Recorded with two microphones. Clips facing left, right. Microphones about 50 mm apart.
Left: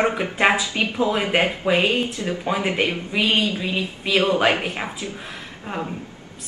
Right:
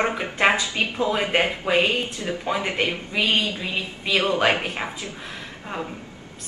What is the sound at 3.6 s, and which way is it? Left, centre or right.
A woman's voice, centre.